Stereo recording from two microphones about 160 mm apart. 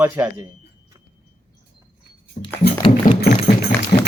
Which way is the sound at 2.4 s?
45° left (ahead or behind).